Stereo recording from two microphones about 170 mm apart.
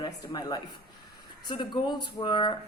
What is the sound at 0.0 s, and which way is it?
A woman's voice, 25° left (ahead or behind).